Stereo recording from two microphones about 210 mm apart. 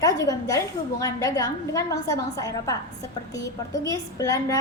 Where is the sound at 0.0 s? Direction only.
15° left (ahead or behind).